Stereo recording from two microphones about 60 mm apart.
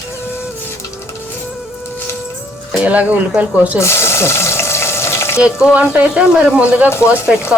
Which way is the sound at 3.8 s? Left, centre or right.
Left.